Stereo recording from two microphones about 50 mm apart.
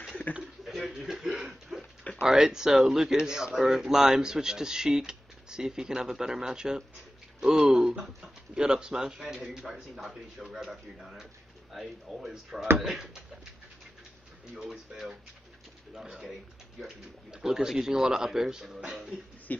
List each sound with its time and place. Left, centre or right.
0.3 s speech: left
0.8 s a sound: centre
2.2 s speech: centre
14.5 s speech: centre